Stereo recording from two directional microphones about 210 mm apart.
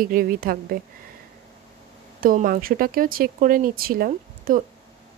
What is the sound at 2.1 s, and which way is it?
A woman's voice, 40° right (ahead or behind).